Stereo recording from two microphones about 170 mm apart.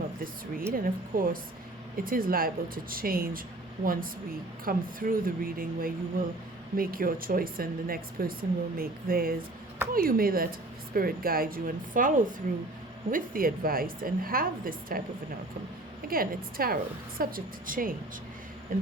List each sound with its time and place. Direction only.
0.7 s speech: 55° right (ahead or behind)
4.6 s speech: 55° right (ahead or behind)
16.0 s speech: 60° right (ahead or behind)